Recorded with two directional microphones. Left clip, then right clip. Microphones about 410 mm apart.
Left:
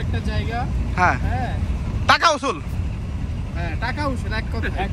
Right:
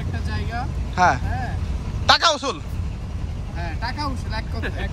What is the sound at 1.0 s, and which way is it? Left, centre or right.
Speech, centre.